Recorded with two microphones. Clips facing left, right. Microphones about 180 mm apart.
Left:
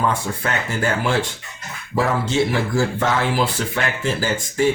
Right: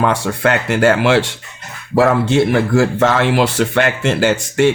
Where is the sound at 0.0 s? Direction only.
80° right.